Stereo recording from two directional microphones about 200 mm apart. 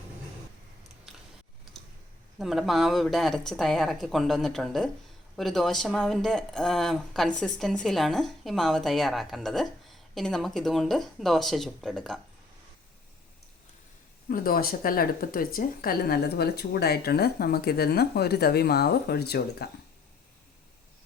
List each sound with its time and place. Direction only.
2.4 s speech: centre (ahead or behind)
14.3 s a woman's voice: 45° left (ahead or behind)